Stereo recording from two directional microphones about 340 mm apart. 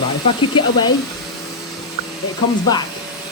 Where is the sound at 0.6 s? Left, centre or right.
Centre.